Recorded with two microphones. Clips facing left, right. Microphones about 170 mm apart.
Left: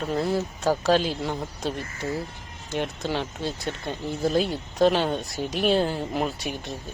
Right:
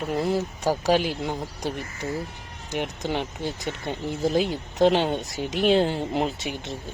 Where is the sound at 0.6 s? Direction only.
15° right (ahead or behind).